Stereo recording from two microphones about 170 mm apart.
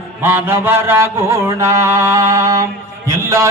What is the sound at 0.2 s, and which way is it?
Mantra, 10° right (ahead or behind).